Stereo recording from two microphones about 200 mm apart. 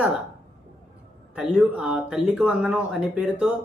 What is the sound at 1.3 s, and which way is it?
Speech, 5° right (ahead or behind).